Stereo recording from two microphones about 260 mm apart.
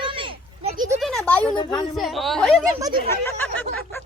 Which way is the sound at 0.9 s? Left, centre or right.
Centre.